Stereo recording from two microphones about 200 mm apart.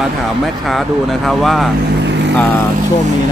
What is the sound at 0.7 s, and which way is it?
Speech, centre (ahead or behind).